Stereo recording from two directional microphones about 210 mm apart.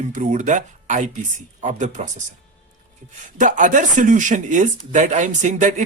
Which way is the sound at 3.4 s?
40° right (ahead or behind).